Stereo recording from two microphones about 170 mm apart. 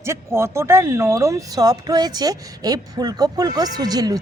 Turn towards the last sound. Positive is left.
turn(degrees=-20)  # may be behind; listen again after turning